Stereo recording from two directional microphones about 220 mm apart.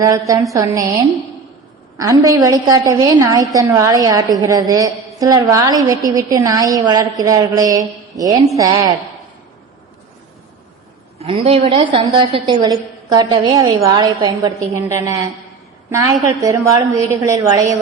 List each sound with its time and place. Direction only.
0.3 s a woman's voice: 15° right (ahead or behind)
2.0 s a woman's voice: 15° right (ahead or behind)
11.2 s a woman's voice: 25° right (ahead or behind)